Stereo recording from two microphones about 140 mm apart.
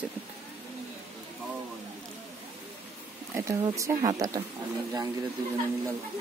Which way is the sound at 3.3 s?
20° right (ahead or behind).